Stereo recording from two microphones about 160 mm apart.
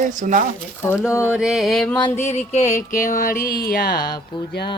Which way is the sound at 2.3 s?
45° left (ahead or behind).